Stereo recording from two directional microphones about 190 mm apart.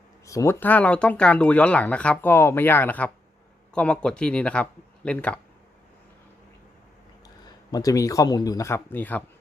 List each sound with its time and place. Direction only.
0.3 s speech: 15° left (ahead or behind)
7.7 s speech: 20° left (ahead or behind)